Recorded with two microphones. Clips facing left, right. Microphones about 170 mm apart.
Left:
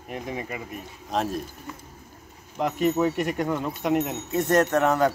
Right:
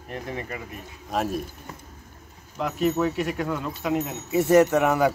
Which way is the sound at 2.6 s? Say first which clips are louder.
Left 1 dB; 5° right (ahead or behind).